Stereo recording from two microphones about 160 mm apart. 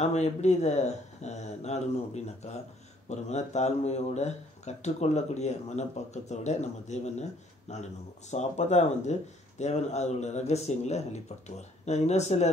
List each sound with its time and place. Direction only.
0.0 s speech: 45° left (ahead or behind)